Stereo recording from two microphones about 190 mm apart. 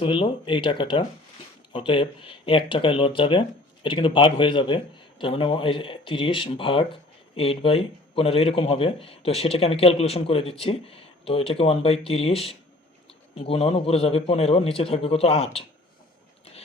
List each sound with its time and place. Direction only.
0.0 s speech: 25° left (ahead or behind)